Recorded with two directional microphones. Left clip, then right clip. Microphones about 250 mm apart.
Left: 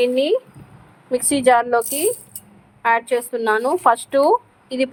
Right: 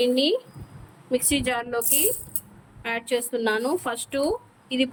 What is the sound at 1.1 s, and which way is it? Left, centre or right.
Speech, centre.